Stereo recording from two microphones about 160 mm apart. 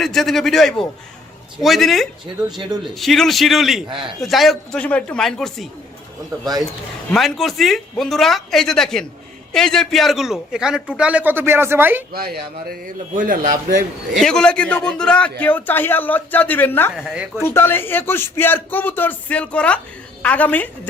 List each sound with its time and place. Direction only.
0.0 s a man's voice: centre (ahead or behind)
3.8 s speech: 30° right (ahead or behind)
4.2 s a man's voice: centre (ahead or behind)
7.1 s a man's voice: centre (ahead or behind)
12.1 s a man's voice: 75° right (ahead or behind); by 13.7 s 55° right (ahead or behind)
14.2 s a man's voice: 5° left (ahead or behind)
17.0 s a man's voice: 5° right (ahead or behind)
17.4 s a man's voice: 15° left (ahead or behind)